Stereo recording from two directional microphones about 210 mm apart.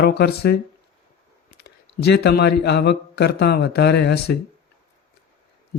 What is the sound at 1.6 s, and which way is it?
Speech, 50° left (ahead or behind).